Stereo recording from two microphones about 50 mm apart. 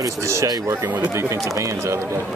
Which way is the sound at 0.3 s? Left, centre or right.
Right.